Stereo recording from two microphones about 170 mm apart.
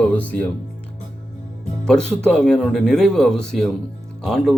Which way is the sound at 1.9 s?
5° left (ahead or behind).